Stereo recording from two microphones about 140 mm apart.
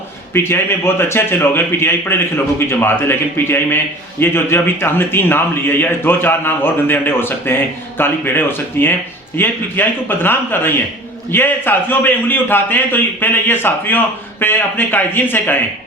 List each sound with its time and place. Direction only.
0.3 s a man's voice: 15° left (ahead or behind)